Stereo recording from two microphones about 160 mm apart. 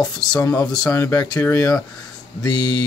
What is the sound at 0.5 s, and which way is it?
Speech, 5° left (ahead or behind).